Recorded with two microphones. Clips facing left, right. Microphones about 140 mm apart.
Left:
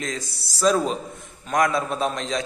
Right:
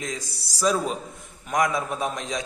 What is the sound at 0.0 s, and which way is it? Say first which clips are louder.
A man's voice: left 2 dB; 10° right (ahead or behind).